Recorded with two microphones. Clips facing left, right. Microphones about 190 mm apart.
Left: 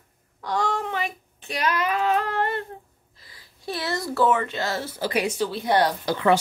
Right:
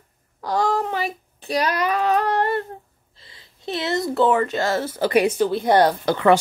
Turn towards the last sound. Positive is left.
turn(degrees=-60)  # may be behind; listen again after turning